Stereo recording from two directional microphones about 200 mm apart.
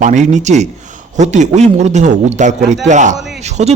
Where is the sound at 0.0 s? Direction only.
35° right (ahead or behind).